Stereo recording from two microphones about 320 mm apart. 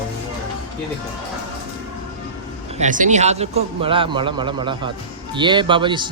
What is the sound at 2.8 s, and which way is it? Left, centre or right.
Speech, right.